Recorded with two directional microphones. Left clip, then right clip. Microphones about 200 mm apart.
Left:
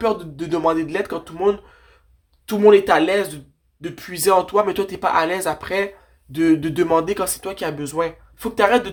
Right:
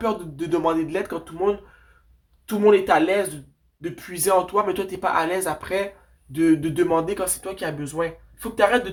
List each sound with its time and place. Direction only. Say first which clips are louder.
0.0 s speech: left 4 dB; 20° left (ahead or behind); by 8.8 s 40° left (ahead or behind)